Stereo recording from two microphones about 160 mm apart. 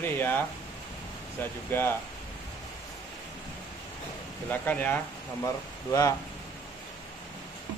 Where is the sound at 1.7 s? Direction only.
15° left (ahead or behind).